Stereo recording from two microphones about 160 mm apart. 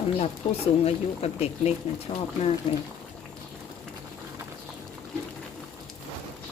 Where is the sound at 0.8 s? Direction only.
40° left (ahead or behind).